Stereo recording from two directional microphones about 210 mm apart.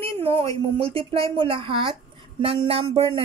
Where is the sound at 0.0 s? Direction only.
25° right (ahead or behind).